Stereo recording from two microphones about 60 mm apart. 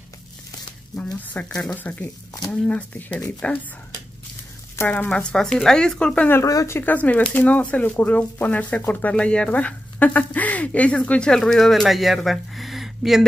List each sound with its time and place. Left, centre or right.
0.9 s speech: left
2.5 s speech: centre
4.8 s speech: left
5.1 s speech: centre
6.4 s speech: left
6.8 s speech: left; by 12.2 s centre
12.3 s a sound: centre